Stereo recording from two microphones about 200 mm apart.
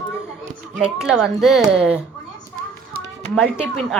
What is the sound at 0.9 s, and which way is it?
Speech, centre (ahead or behind).